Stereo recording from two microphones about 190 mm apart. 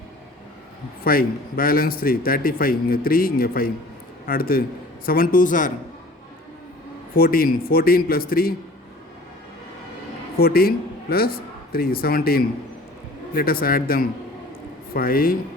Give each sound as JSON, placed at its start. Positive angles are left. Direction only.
{"t": 1.0, "sound": "a man's voice", "side_deg": 50}
{"t": 7.2, "sound": "a man's voice", "side_deg": 50}
{"t": 10.3, "sound": "a man's voice", "side_deg": 55}